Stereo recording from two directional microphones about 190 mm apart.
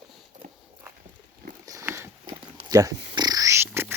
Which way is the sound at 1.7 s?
15° right (ahead or behind).